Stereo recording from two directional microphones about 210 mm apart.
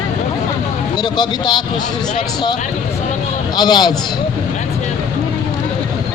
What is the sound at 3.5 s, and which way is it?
Speech, 20° left (ahead or behind).